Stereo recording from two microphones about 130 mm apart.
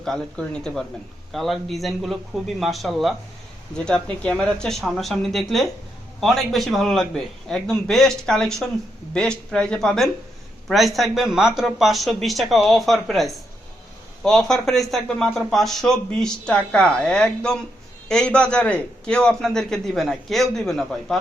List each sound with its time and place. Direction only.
0.0 s a man's voice: 5° left (ahead or behind)